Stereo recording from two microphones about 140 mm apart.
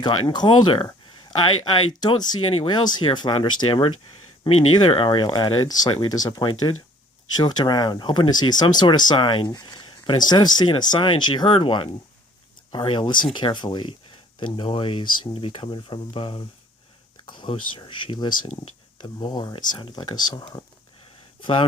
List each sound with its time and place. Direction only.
0.0 s speech: 30° left (ahead or behind)